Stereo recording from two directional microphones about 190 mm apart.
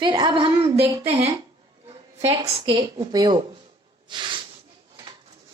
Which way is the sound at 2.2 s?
20° right (ahead or behind).